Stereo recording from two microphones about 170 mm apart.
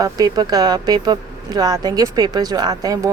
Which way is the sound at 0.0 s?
20° right (ahead or behind).